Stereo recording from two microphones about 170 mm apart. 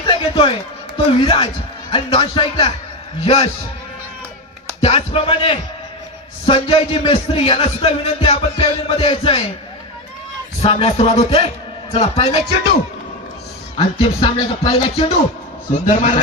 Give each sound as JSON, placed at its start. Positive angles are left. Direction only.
{"t": 0.1, "sound": "a man's voice", "side_deg": 30}
{"t": 4.8, "sound": "a man's voice", "side_deg": 35}
{"t": 10.6, "sound": "a man's voice", "side_deg": 35}
{"t": 13.7, "sound": "a man's voice", "side_deg": 30}
{"t": 15.9, "sound": "a man's voice", "side_deg": 45}